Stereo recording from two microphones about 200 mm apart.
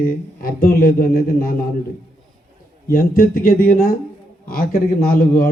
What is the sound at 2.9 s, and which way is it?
Speech, 50° left (ahead or behind).